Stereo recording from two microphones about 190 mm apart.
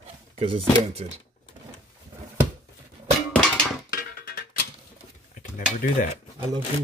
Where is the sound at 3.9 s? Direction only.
55° left (ahead or behind).